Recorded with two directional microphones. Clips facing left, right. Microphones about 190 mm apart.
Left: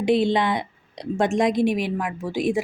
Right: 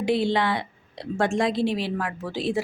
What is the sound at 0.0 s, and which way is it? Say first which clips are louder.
A woman's voice: left 3 dB; 20° left (ahead or behind).